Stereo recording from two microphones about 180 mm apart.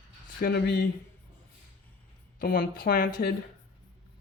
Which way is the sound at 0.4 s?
65° left (ahead or behind).